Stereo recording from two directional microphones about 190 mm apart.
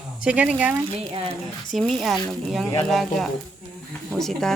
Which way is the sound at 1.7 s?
Centre (ahead or behind).